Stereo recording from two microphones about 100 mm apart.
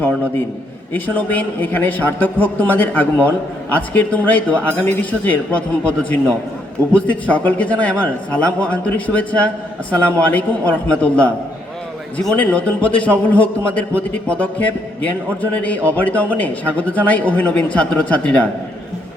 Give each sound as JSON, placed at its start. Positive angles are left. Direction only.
{"t": 0.9, "sound": "a man's voice", "side_deg": 15}